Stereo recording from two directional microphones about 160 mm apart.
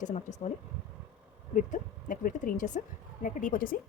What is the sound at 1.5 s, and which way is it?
Speech, 55° left (ahead or behind).